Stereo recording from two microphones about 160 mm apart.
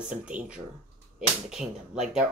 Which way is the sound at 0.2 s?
5° right (ahead or behind).